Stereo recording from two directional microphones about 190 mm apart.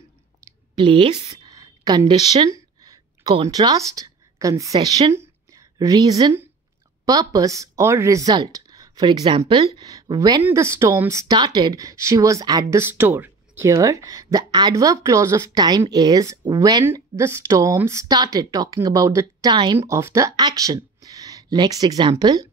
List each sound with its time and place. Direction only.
0.5 s a sound: 25° right (ahead or behind)
1.6 s speech: 20° right (ahead or behind)
19.8 s speech: 15° right (ahead or behind)